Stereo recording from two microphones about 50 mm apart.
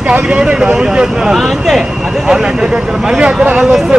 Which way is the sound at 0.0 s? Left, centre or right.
Right.